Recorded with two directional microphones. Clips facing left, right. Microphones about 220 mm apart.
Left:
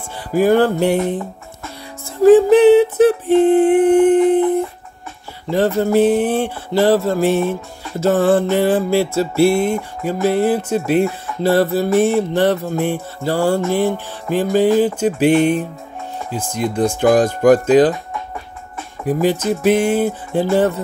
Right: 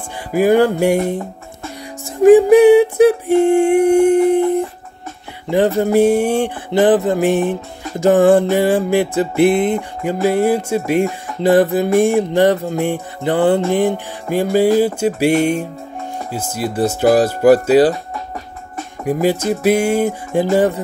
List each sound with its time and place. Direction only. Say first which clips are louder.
0.3 s music: right 1 dB; 10° right (ahead or behind)
5.8 s music: even; 15° right (ahead or behind)
16.3 s music: left 1 dB; 5° right (ahead or behind)
19.0 s music: even; 10° right (ahead or behind)